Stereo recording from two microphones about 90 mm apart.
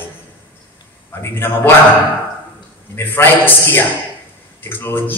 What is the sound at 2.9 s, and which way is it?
Speech, 25° left (ahead or behind).